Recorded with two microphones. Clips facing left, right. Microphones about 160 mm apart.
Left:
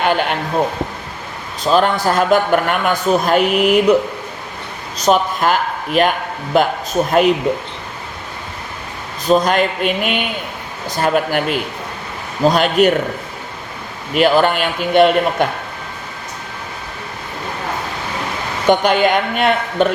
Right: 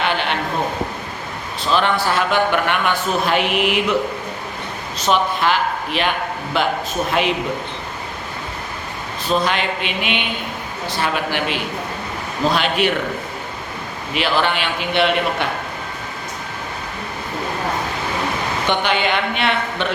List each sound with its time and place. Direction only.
0.0 s a sound: 45° left (ahead or behind)
1.6 s a man's voice: 40° left (ahead or behind)
4.9 s speech: 40° left (ahead or behind)
9.2 s speech: 40° left (ahead or behind)
14.1 s speech: 45° left (ahead or behind)
18.7 s speech: 45° left (ahead or behind)